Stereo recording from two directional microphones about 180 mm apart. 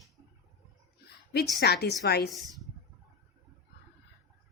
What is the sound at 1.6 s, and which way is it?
Speech, 65° left (ahead or behind).